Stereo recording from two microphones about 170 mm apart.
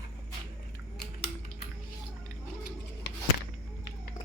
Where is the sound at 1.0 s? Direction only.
70° left (ahead or behind).